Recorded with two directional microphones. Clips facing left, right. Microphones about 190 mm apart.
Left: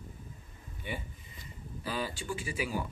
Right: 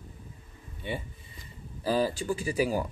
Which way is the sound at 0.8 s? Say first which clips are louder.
Right 5 dB; 25° right (ahead or behind).